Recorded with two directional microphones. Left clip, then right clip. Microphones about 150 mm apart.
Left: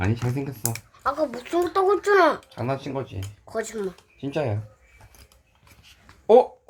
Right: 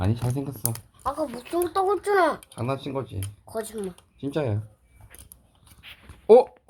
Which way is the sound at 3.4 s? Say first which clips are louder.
Left 3 dB; 10° left (ahead or behind).